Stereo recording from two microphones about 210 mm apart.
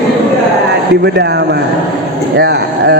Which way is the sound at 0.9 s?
55° right (ahead or behind).